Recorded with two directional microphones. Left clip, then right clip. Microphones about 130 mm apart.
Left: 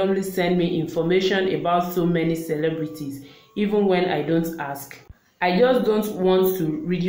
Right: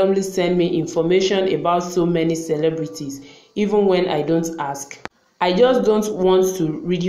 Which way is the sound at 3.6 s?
20° right (ahead or behind).